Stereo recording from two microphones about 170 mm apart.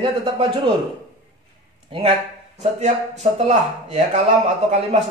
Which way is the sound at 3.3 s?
40° right (ahead or behind).